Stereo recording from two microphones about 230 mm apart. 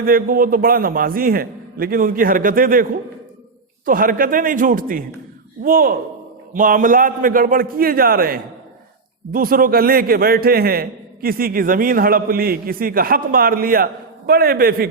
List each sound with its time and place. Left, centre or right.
0.0 s a man's voice: right
3.8 s a man's voice: right